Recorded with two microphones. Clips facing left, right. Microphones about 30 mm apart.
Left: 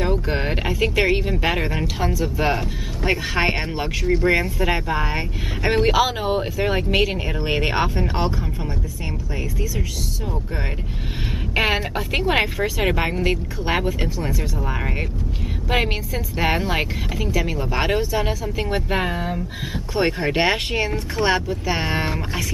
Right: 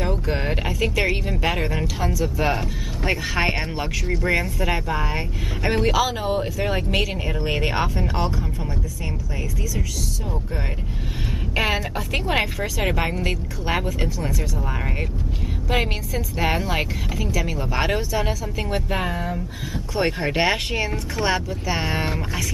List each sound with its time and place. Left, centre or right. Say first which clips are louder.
0.0 s speech: left 2 dB; centre
11.5 s speech: left 2 dB; centre
20.0 s speech: left 2 dB; centre